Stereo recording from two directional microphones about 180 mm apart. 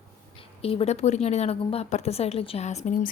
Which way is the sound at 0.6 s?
30° left (ahead or behind).